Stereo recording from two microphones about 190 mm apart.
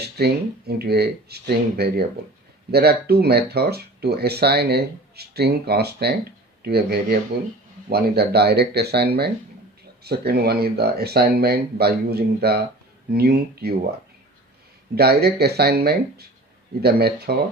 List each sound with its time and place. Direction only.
0.2 s speech: 55° right (ahead or behind)
14.9 s speech: 55° right (ahead or behind)